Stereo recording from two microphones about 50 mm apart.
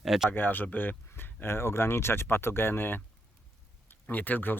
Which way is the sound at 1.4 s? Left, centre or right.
Left.